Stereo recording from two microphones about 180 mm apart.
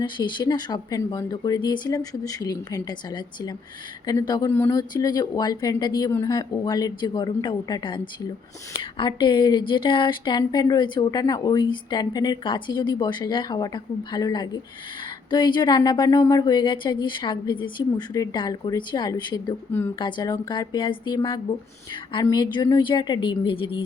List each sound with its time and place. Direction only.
0.0 s speech: 25° left (ahead or behind)
4.0 s speech: 20° left (ahead or behind)